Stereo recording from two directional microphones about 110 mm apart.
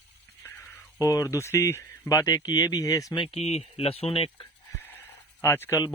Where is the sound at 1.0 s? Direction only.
30° left (ahead or behind).